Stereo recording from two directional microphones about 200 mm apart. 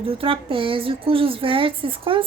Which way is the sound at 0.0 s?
25° right (ahead or behind).